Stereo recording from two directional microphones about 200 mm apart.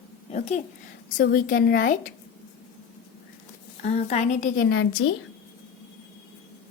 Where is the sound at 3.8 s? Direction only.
35° left (ahead or behind).